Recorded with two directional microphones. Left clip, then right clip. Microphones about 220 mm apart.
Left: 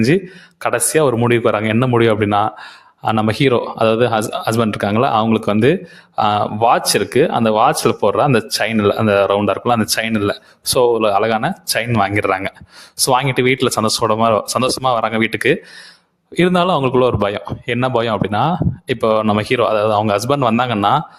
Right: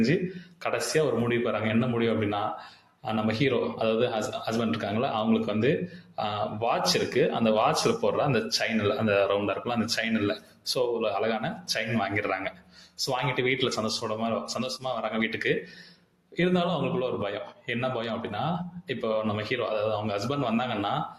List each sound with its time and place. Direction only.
0.6 s speech: 45° left (ahead or behind)